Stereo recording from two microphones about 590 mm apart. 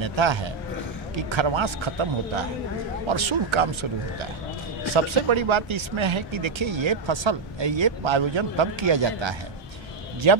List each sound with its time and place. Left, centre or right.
0.0 s speech: right
4.9 s speech: right